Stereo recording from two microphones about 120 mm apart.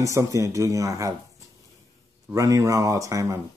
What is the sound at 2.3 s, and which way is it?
Speech, 30° right (ahead or behind).